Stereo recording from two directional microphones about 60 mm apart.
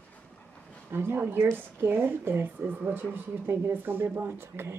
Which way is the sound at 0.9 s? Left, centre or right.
Right.